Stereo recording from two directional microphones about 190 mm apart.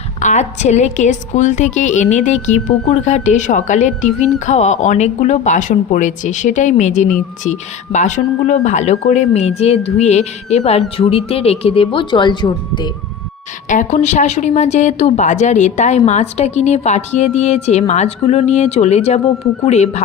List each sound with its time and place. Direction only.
0.2 s a woman's voice: 40° left (ahead or behind)
13.7 s a woman's voice: 40° left (ahead or behind)